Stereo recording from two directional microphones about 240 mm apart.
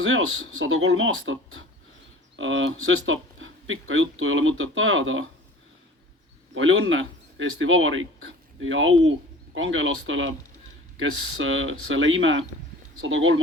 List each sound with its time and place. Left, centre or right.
0.0 s speech: right
6.5 s speech: right